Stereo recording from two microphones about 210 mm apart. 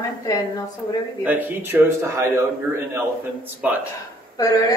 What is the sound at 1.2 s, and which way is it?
A man's voice, 10° right (ahead or behind).